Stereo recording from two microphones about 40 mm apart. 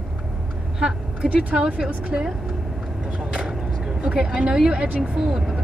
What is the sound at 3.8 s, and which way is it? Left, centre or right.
A woman's voice, right.